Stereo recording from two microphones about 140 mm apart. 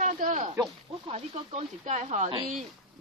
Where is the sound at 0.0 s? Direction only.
60° right (ahead or behind).